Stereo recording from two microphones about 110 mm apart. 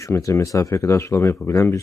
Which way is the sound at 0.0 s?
30° left (ahead or behind).